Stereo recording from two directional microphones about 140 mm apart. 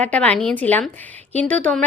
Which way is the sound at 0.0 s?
10° left (ahead or behind).